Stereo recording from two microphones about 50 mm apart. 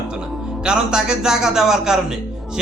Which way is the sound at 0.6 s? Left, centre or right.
Centre.